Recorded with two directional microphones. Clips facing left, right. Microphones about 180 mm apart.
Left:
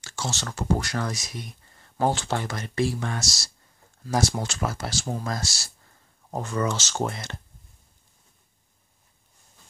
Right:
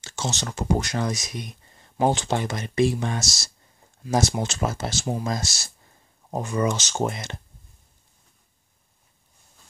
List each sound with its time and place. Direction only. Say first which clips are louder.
0.0 s speech: right 2 dB; 20° right (ahead or behind)